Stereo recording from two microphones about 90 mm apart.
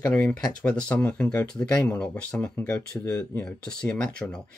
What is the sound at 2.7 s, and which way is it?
Speech, 35° left (ahead or behind).